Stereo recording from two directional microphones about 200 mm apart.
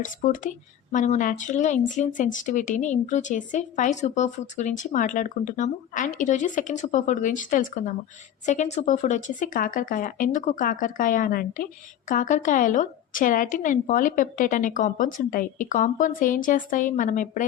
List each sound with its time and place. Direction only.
0.2 s speech: 40° left (ahead or behind)